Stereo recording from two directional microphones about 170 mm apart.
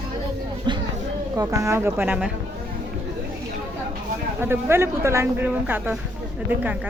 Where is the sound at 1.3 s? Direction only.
20° right (ahead or behind).